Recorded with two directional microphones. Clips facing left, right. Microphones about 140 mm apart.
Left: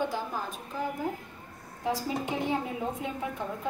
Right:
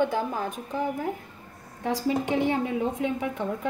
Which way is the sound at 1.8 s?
85° right.